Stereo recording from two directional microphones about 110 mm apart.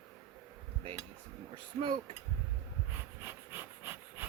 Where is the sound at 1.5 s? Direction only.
50° right (ahead or behind).